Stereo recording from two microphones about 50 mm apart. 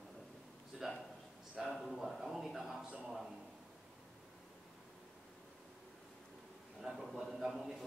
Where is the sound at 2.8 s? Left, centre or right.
Centre.